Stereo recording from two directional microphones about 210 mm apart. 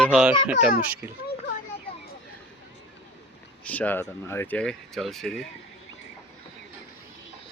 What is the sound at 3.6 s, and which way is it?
Speech, 5° left (ahead or behind).